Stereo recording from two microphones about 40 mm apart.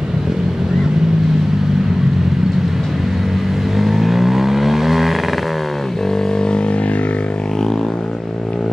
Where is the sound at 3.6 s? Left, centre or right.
Centre.